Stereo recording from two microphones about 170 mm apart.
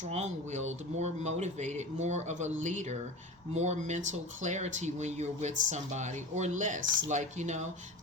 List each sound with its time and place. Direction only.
0.0 s speech: 40° right (ahead or behind)